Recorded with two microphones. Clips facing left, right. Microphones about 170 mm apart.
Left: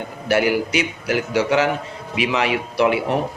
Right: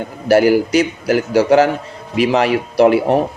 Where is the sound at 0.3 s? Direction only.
40° right (ahead or behind).